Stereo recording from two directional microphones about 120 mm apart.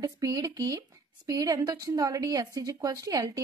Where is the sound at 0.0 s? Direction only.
30° right (ahead or behind).